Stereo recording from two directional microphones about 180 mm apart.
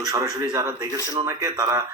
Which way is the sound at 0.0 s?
20° right (ahead or behind).